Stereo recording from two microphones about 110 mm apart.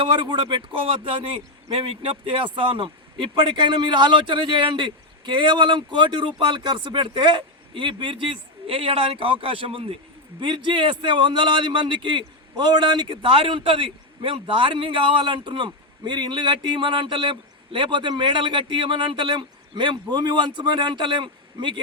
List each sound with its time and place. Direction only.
0.0 s a man's voice: 50° right (ahead or behind)